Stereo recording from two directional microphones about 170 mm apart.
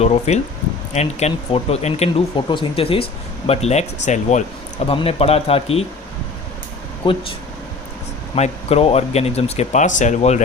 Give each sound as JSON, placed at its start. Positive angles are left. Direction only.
{"t": 0.0, "sound": "speech", "side_deg": 40}
{"t": 4.9, "sound": "speech", "side_deg": 35}
{"t": 7.0, "sound": "speech", "side_deg": 30}
{"t": 8.4, "sound": "speech", "side_deg": 35}